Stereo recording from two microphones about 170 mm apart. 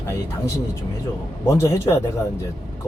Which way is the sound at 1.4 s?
15° left (ahead or behind).